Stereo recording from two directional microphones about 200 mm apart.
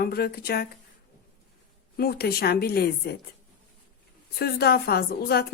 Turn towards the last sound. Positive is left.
turn(degrees=50)  # may be behind; listen again after turning